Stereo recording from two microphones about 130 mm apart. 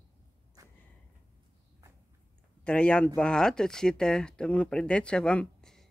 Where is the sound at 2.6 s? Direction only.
10° left (ahead or behind).